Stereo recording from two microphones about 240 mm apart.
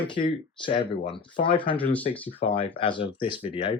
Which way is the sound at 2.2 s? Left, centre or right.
Left.